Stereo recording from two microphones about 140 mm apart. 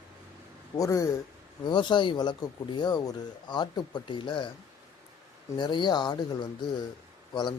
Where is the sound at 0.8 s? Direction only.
25° left (ahead or behind).